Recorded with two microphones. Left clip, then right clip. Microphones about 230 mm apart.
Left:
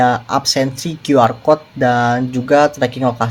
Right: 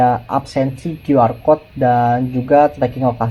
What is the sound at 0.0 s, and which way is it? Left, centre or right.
Speech, left.